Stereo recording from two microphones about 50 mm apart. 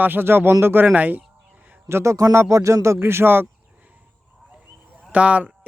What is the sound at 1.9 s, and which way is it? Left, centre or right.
Speech, right.